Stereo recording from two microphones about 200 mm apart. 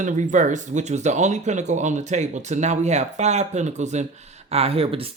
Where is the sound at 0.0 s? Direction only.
40° right (ahead or behind).